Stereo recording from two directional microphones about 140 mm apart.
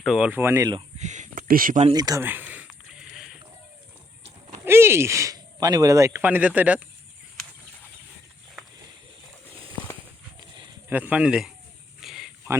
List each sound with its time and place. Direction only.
0.0 s speech: centre (ahead or behind)
0.3 s speech: 15° right (ahead or behind)
0.9 s speech: 60° right (ahead or behind); by 1.8 s 85° right
1.9 s speech: 25° right (ahead or behind)
2.2 s a sound: 15° right (ahead or behind)
4.6 s speech: 15° right (ahead or behind)
10.8 s speech: 15° right (ahead or behind)
12.0 s a sound: centre (ahead or behind)